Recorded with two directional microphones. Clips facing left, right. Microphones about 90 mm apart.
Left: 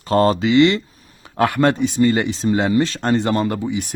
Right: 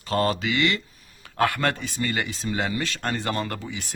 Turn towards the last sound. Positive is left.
turn(degrees=20)  # may be behind; listen again after turning